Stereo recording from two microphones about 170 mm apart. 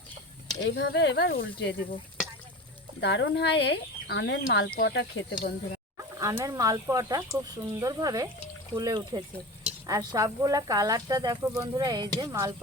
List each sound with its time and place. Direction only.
0.6 s speech: 90° left
3.0 s speech: 90° left
5.4 s speech: 60° left (ahead or behind)
6.0 s speech: 20° right (ahead or behind)